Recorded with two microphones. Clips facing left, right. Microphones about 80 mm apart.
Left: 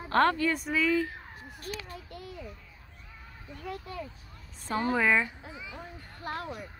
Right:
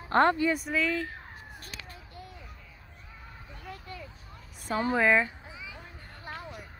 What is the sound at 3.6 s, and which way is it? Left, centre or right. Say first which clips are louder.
Speech: left 5 dB; left.